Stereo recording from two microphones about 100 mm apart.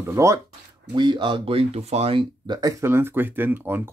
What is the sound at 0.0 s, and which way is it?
Speech, 30° right (ahead or behind).